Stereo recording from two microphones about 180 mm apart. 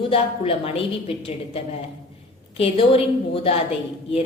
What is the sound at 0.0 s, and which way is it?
A woman's voice, 30° left (ahead or behind).